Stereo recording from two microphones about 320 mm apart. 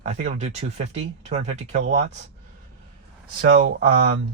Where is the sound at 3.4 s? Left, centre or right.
Right.